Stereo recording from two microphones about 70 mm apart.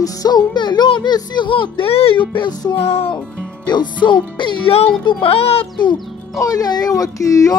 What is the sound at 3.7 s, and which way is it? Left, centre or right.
Speech, left.